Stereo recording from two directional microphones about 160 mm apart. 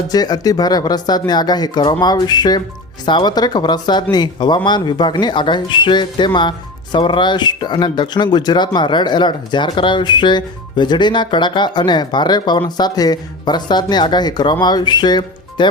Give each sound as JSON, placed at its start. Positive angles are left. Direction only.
{"t": 0.1, "sound": "speech", "side_deg": 25}